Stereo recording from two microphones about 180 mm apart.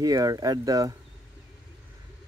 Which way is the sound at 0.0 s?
20° right (ahead or behind).